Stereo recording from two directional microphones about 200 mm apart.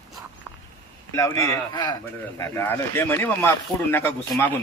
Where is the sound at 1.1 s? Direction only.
15° left (ahead or behind).